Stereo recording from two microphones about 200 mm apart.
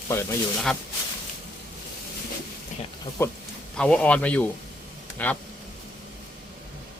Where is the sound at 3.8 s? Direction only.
5° left (ahead or behind).